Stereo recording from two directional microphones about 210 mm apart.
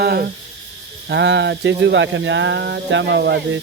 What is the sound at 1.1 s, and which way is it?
Speech, 55° right (ahead or behind).